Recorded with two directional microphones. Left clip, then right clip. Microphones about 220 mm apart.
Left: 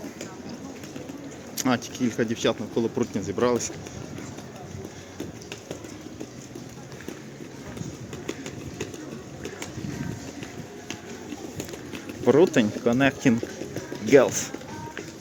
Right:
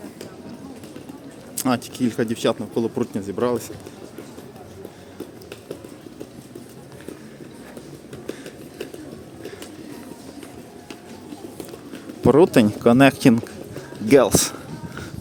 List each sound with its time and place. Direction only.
1.5 s speech: 20° right (ahead or behind)
12.2 s speech: 30° right (ahead or behind)